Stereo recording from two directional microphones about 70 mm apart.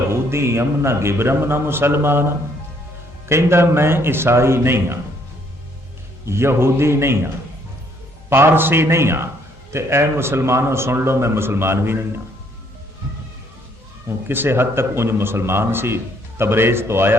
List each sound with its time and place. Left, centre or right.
0.1 s a man's voice: right
6.2 s a man's voice: right
8.3 s a man's voice: right
14.3 s a man's voice: right